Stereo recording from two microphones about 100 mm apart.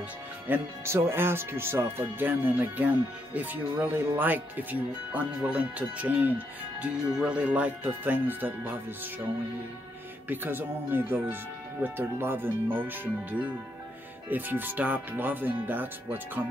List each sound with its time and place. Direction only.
0.5 s speech: 25° right (ahead or behind)
10.2 s speech: 20° right (ahead or behind)